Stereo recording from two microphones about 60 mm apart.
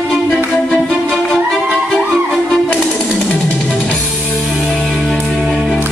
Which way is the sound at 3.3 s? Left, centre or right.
Left.